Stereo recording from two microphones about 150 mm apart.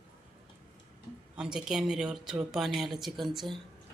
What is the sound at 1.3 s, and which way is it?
A woman's voice, 5° right (ahead or behind).